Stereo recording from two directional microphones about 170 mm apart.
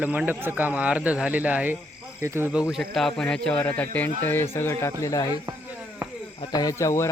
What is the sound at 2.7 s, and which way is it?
Speech, centre (ahead or behind).